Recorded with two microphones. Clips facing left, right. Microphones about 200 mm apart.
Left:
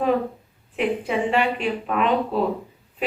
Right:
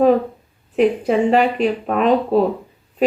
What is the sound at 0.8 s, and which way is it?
Speech, 40° right (ahead or behind).